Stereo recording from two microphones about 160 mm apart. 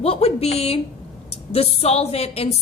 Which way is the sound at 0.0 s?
40° left (ahead or behind).